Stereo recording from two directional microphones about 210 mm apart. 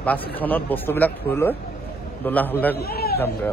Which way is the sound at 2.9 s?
45° left (ahead or behind).